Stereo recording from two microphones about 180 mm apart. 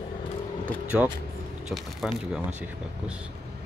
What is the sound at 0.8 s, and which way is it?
Speech, 5° right (ahead or behind).